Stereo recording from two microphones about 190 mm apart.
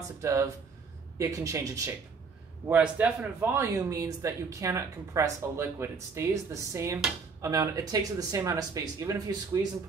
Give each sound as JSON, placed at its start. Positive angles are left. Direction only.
{"t": 0.2, "sound": "speech", "side_deg": -15}
{"t": 2.7, "sound": "speech", "side_deg": -5}